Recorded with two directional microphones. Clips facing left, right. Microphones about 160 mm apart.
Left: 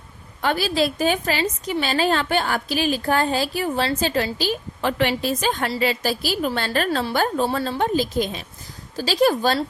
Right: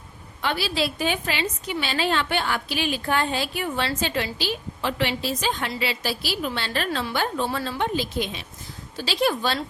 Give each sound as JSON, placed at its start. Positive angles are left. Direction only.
{"t": 0.4, "sound": "a woman's voice", "side_deg": 45}